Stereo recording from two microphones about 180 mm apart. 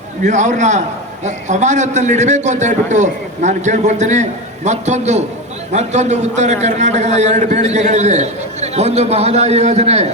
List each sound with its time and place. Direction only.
0.3 s a man's voice: 40° right (ahead or behind)